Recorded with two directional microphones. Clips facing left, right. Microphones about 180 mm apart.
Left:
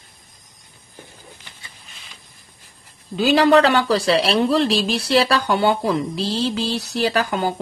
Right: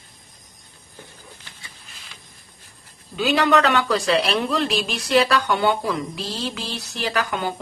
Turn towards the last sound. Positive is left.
turn(degrees=30)  # may be behind; listen again after turning